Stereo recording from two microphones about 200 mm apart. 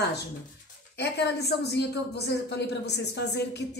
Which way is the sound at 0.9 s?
55° left (ahead or behind).